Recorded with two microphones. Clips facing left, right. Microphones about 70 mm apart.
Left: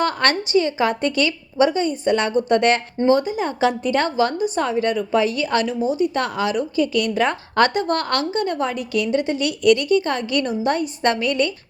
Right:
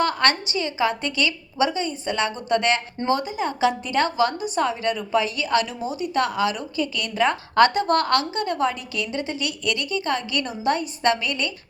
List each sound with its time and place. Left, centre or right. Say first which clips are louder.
0.0 s a woman's voice: left 1 dB; left